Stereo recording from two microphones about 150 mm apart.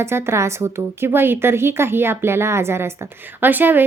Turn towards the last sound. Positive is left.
turn(degrees=-15)  # may be behind; listen again after turning